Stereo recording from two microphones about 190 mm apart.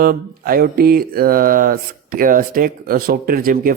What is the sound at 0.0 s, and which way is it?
Mantra, 50° right (ahead or behind).